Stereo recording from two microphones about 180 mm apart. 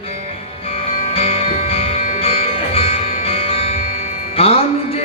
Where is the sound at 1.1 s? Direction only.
35° left (ahead or behind).